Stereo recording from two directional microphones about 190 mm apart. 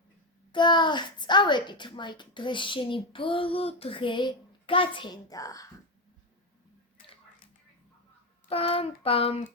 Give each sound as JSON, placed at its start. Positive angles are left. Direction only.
{"t": 0.5, "sound": "a child's voice", "side_deg": 25}
{"t": 8.4, "sound": "a child's voice", "side_deg": 30}